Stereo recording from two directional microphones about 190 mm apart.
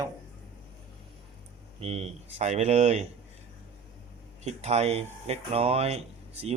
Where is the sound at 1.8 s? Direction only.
35° right (ahead or behind).